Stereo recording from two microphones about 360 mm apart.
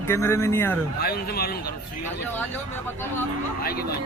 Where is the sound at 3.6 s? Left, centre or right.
Left.